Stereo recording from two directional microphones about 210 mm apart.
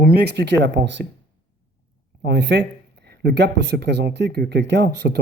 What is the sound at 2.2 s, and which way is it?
Speech, 55° right (ahead or behind).